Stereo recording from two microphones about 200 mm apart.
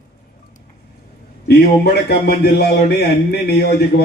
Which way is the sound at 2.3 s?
50° left (ahead or behind).